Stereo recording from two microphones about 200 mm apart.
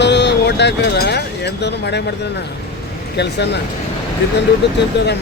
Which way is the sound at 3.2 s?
60° left (ahead or behind).